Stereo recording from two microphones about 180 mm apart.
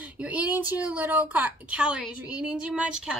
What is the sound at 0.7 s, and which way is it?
A woman's voice, 10° right (ahead or behind).